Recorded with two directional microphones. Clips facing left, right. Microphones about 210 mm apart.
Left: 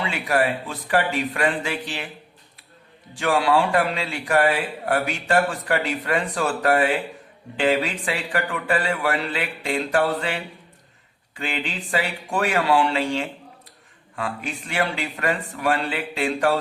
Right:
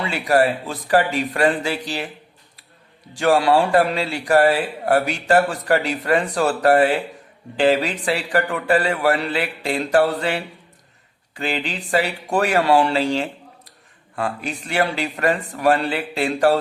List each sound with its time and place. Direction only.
0.3 s a man's voice: 40° right (ahead or behind)
3.2 s a man's voice: 40° right (ahead or behind)
11.3 s a man's voice: 40° right (ahead or behind)